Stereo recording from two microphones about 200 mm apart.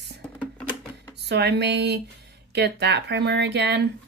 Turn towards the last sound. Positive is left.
turn(degrees=-55)  # may be behind; listen again after turning